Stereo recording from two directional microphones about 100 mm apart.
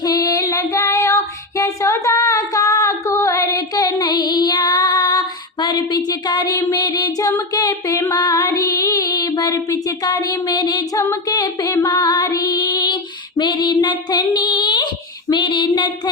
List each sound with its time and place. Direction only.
0.0 s child singing: 40° left (ahead or behind)
8.1 s female singing: 35° left (ahead or behind)